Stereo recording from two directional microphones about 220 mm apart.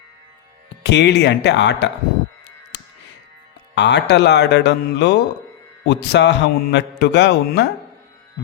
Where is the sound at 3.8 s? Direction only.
50° left (ahead or behind).